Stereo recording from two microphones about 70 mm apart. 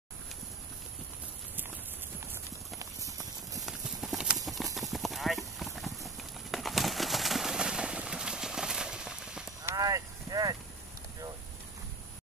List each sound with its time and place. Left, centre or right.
2.8 s clip-clop: right
3.6 s clip-clop: centre
9.8 s clip-clop: right